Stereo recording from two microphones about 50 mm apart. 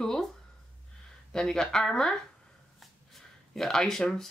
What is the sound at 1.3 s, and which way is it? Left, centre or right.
Speech, centre.